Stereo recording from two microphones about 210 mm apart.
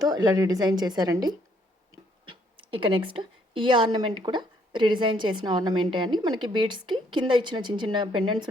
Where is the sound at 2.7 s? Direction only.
25° right (ahead or behind).